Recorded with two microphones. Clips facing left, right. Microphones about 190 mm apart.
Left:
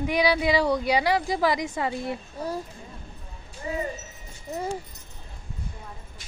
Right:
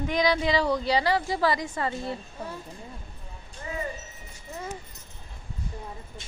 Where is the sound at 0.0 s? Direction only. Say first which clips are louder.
Left 2 dB; 10° left (ahead or behind).